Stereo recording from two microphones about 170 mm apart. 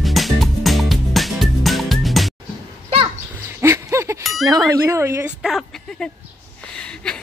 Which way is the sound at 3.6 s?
15° right (ahead or behind).